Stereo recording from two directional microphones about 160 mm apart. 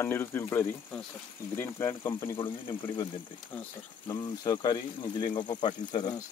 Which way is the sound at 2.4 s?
30° left (ahead or behind).